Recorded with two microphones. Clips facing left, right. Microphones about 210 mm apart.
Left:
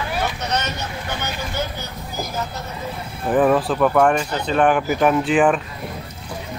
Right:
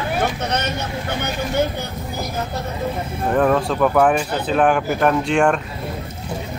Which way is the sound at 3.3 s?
5° left (ahead or behind).